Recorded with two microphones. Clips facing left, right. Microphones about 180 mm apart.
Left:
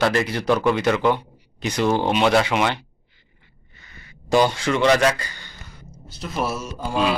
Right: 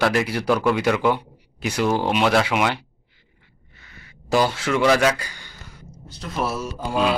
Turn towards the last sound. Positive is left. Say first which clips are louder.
# right 1 dB
turn(degrees=0)  # may be behind; listen again after turning